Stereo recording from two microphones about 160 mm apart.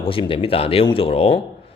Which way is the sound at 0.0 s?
35° left (ahead or behind).